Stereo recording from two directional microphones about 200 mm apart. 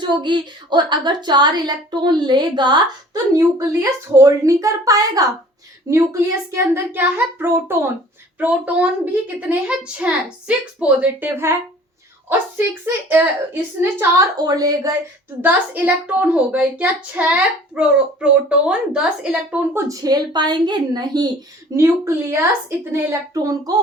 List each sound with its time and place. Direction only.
0.0 s a woman's voice: 25° right (ahead or behind)
12.8 s a woman's voice: 10° right (ahead or behind)